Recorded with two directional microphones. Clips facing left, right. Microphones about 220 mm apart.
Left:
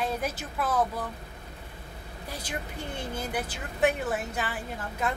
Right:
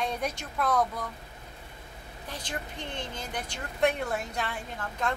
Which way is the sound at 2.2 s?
10° left (ahead or behind).